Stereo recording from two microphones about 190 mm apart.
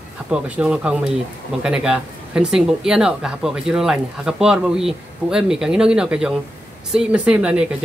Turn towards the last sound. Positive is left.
turn(degrees=-5)  # may be behind; listen again after turning